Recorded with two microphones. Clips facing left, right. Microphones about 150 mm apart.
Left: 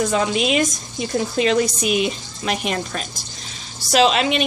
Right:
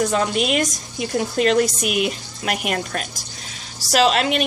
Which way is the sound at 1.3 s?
55° right (ahead or behind).